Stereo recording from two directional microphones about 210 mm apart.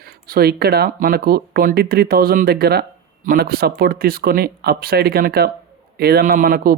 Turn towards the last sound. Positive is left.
turn(degrees=-45)  # may be behind; listen again after turning